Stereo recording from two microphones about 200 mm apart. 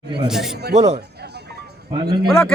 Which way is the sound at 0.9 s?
55° right (ahead or behind).